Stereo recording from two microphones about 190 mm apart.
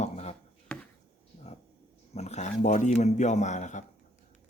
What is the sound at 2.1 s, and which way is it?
Speech, 35° left (ahead or behind).